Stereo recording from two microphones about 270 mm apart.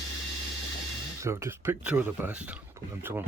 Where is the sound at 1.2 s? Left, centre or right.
Centre.